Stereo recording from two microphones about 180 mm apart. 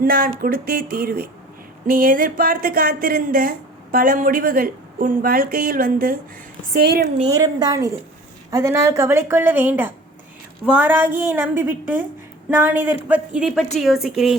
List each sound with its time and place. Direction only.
0.0 s a woman's voice: 50° right (ahead or behind)
7.3 s a woman's voice: 20° right (ahead or behind); by 14.3 s centre (ahead or behind)